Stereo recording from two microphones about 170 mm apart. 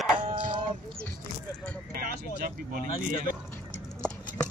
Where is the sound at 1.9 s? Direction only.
60° right (ahead or behind).